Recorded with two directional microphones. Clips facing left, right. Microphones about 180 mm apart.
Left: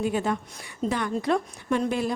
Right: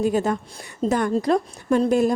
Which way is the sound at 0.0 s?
40° right (ahead or behind).